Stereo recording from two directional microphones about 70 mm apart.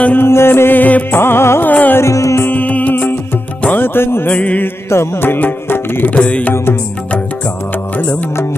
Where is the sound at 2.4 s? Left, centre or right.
Left.